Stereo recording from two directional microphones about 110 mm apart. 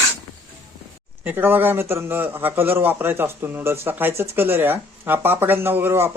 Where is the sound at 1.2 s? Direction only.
15° right (ahead or behind).